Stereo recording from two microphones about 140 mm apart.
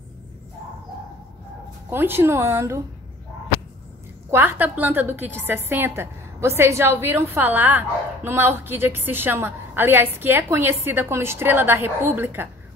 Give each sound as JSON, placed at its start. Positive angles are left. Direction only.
{"t": 1.9, "sound": "a woman's voice", "side_deg": -15}
{"t": 4.3, "sound": "a woman's voice", "side_deg": -15}